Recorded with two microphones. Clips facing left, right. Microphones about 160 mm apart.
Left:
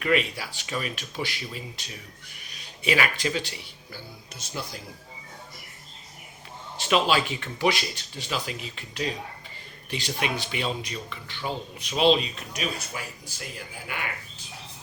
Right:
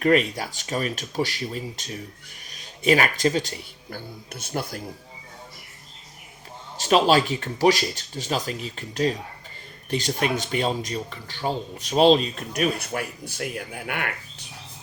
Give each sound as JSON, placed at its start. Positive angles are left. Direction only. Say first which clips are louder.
{"t": 0.0, "sound": "speech", "louder": "right 5 dB", "side_deg": -40}
{"t": 6.7, "sound": "speech", "louder": "right 5 dB", "side_deg": -40}